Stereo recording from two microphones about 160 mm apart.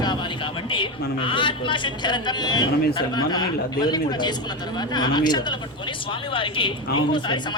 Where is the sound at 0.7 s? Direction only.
30° left (ahead or behind).